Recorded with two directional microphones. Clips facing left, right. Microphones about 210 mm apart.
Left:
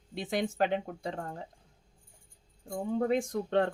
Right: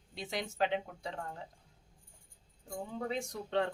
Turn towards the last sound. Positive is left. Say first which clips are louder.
# left 6 dB
turn(degrees=55)  # may be behind; listen again after turning